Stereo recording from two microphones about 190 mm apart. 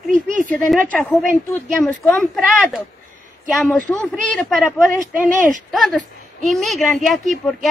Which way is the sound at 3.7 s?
5° left (ahead or behind).